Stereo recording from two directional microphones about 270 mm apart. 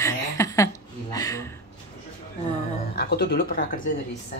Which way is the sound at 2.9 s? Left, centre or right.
Left.